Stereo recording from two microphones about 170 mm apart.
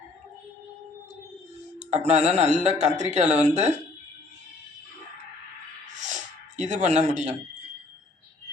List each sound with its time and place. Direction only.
1.9 s speech: 40° right (ahead or behind)
6.6 s speech: 45° right (ahead or behind)